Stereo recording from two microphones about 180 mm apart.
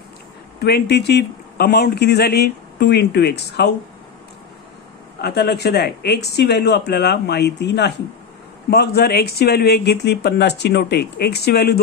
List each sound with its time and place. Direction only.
0.6 s speech: 65° left (ahead or behind)
5.2 s speech: 65° left (ahead or behind)